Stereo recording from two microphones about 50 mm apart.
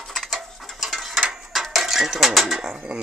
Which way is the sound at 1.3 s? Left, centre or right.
Centre.